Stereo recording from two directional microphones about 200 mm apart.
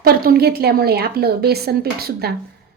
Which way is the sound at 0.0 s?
50° right (ahead or behind).